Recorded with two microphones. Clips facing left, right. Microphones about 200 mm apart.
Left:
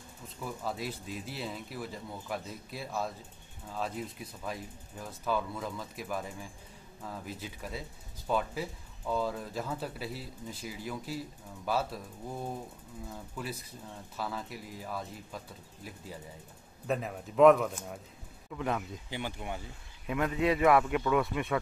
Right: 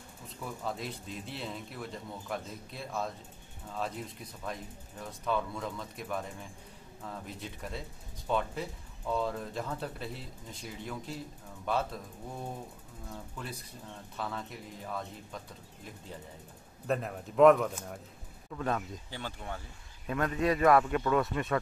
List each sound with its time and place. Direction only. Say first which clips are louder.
0.4 s speech: left 1 dB; 5° left (ahead or behind)
13.1 s speech: left 2 dB; 5° left (ahead or behind)